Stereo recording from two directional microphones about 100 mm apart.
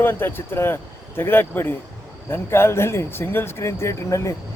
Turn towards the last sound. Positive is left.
turn(degrees=30)  # may be behind; listen again after turning